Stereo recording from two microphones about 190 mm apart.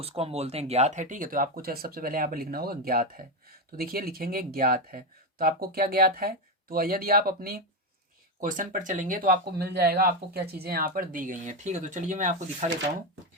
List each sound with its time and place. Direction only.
0.0 s speech: 30° right (ahead or behind)